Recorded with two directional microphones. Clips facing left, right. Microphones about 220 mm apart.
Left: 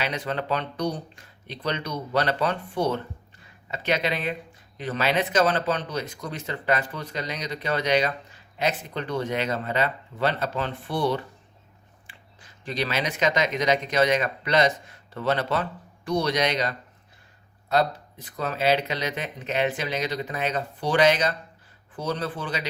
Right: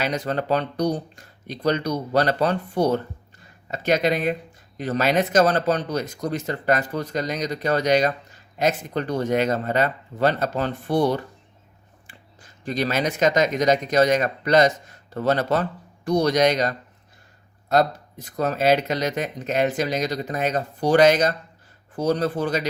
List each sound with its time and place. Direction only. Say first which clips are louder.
0.0 s speech: right 4 dB; 40° right (ahead or behind)